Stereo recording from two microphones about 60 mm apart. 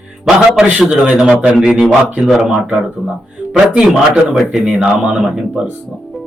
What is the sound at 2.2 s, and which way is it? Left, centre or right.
Speech, centre.